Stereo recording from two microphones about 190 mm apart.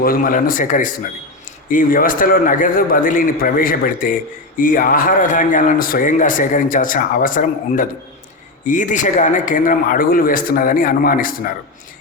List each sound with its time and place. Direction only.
0.0 s speech: 45° left (ahead or behind)